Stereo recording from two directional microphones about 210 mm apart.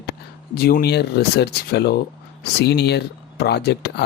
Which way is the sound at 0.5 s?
45° left (ahead or behind).